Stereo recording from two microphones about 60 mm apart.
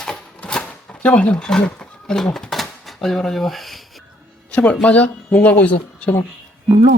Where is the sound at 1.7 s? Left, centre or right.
Centre.